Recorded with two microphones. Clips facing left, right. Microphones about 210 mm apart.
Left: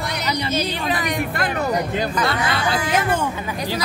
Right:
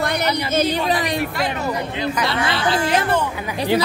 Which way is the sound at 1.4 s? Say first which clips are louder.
Left 1 dB; 50° left (ahead or behind).